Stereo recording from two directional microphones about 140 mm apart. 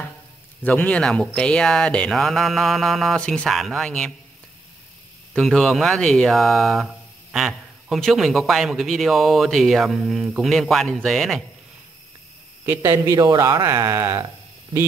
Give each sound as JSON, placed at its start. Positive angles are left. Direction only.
{"t": 0.7, "sound": "a man's voice", "side_deg": 10}
{"t": 5.3, "sound": "a man's voice", "side_deg": 5}
{"t": 12.6, "sound": "speech", "side_deg": -15}